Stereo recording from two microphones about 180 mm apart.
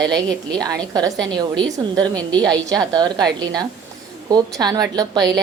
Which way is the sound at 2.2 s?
5° left (ahead or behind).